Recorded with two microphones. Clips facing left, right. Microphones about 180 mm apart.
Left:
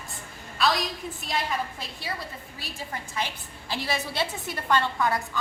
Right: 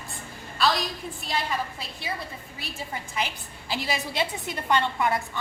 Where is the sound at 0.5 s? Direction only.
Centre (ahead or behind).